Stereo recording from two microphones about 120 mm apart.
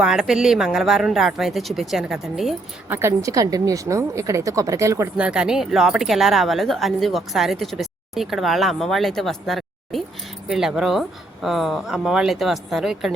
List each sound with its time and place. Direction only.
0.0 s speech: 5° right (ahead or behind)
2.9 s a woman's voice: 20° right (ahead or behind)
5.1 s speech: 10° right (ahead or behind)